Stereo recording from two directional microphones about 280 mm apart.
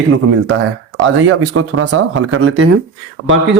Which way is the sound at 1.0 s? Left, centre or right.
Right.